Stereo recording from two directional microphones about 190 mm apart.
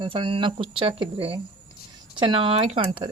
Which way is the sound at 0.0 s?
25° right (ahead or behind).